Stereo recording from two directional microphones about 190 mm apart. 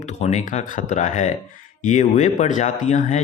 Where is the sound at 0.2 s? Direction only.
35° left (ahead or behind).